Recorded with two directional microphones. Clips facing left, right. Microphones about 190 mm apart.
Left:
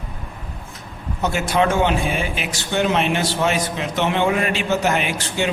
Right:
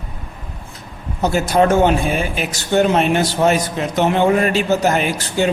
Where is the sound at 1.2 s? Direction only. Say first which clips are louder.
Right 4 dB; 40° right (ahead or behind).